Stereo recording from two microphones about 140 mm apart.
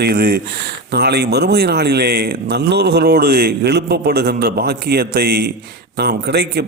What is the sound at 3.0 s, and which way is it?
Speech, 90° right.